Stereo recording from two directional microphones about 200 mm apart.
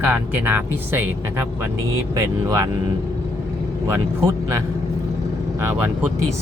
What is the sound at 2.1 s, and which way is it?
Speech, 15° right (ahead or behind).